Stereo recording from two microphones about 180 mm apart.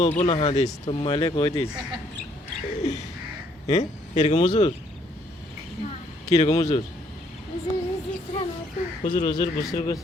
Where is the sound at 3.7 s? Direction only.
40° left (ahead or behind).